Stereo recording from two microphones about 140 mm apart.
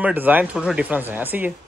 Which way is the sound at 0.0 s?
15° right (ahead or behind).